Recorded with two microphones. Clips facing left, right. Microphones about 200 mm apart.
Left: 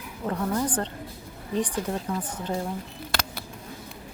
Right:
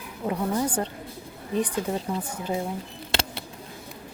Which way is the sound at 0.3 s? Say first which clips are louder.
Right 1 dB; 10° right (ahead or behind).